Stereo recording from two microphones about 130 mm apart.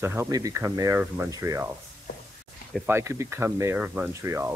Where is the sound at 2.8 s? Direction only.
20° right (ahead or behind).